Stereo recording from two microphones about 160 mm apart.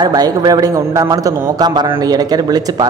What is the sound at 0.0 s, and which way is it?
A man's voice, 25° right (ahead or behind).